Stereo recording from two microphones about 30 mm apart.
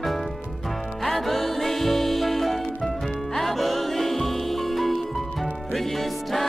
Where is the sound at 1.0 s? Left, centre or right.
Centre.